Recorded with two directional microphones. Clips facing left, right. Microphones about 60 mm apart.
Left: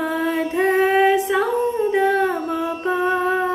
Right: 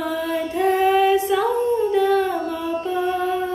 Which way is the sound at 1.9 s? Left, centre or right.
Left.